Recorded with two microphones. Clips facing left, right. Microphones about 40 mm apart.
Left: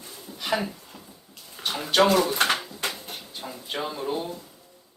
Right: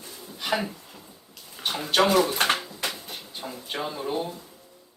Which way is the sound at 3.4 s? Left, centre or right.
Centre.